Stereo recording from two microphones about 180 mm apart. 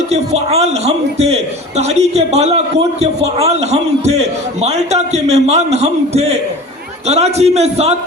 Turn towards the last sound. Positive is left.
turn(degrees=-35)  # may be behind; listen again after turning